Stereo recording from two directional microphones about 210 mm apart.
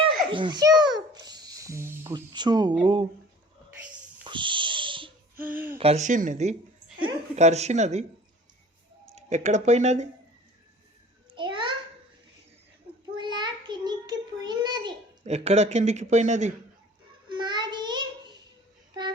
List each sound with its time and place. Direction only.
0.0 s music: 25° right (ahead or behind)
2.8 s speech: 25° right (ahead or behind)
4.2 s owl: 20° right (ahead or behind)
5.4 s a sound: 10° right (ahead or behind)
5.7 s speech: 30° right (ahead or behind)
9.1 s speech: 35° right (ahead or behind)
11.3 s a sound: 20° right (ahead or behind)
13.1 s child singing: 20° right (ahead or behind)
17.2 s child singing: 20° right (ahead or behind)